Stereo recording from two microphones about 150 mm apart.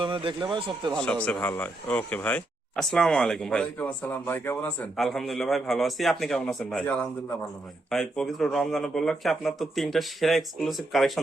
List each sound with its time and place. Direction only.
0.0 s speech: 35° right (ahead or behind)
0.9 s speech: 5° left (ahead or behind)
4.9 s speech: centre (ahead or behind)